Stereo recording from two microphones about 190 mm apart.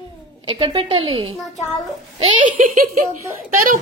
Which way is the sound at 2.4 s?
40° right (ahead or behind).